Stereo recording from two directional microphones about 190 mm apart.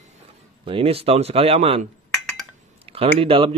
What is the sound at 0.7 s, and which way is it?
A man's voice, 30° right (ahead or behind).